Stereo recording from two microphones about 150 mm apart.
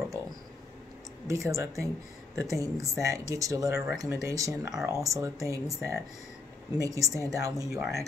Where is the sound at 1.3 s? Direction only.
20° right (ahead or behind).